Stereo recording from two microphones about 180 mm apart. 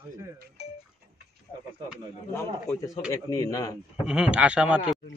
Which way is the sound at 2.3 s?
15° left (ahead or behind).